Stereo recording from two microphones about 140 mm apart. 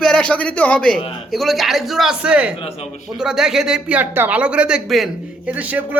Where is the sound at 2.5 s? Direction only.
40° left (ahead or behind).